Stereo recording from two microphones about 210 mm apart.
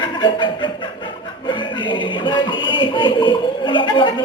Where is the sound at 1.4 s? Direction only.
25° left (ahead or behind).